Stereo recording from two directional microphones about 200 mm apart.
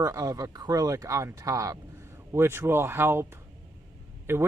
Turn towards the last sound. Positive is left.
turn(degrees=-10)  # may be behind; listen again after turning